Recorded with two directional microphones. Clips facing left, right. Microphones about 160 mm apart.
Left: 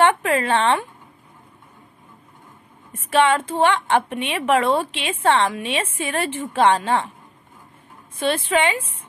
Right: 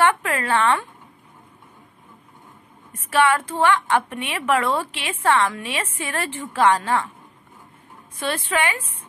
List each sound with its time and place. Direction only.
0.0 s speech: 25° left (ahead or behind)
3.3 s a woman's voice: 20° left (ahead or behind)
8.2 s a woman's voice: 20° left (ahead or behind)